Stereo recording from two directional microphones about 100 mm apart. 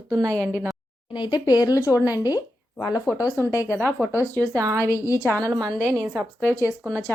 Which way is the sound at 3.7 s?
20° right (ahead or behind).